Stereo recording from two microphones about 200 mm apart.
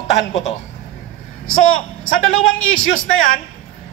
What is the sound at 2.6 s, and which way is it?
Speech, 80° left.